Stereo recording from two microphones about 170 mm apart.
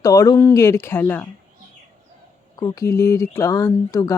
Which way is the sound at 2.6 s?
20° left (ahead or behind).